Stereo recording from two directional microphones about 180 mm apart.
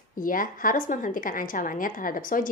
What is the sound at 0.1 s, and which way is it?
A woman's voice, 50° left (ahead or behind).